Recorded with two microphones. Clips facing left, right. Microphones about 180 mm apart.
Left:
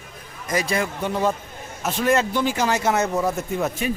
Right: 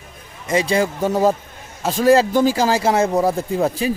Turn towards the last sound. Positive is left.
turn(degrees=-30)  # may be behind; listen again after turning